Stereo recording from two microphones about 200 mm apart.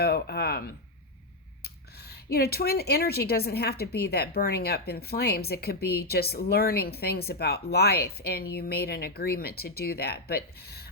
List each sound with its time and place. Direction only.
0.0 s speech: 50° left (ahead or behind)